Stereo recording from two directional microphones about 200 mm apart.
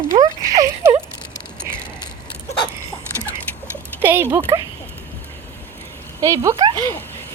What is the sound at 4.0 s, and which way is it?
Speech, 10° right (ahead or behind).